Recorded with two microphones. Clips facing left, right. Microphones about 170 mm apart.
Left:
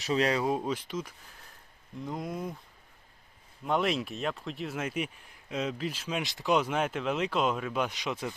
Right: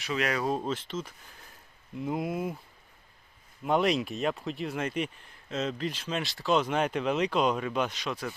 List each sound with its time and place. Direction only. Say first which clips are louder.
0.0 s speech: left 3 dB; 30° left (ahead or behind)
0.4 s speech: even; 10° left (ahead or behind)
2.0 s speech: right 4 dB; 5° right (ahead or behind)
3.6 s speech: right 3 dB; centre (ahead or behind); by 8.4 s 20° left (ahead or behind)